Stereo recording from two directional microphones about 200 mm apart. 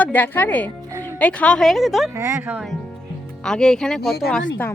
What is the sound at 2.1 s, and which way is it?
A woman's voice, 15° right (ahead or behind).